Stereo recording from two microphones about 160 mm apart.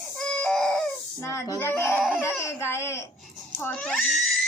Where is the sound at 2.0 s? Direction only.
5° right (ahead or behind).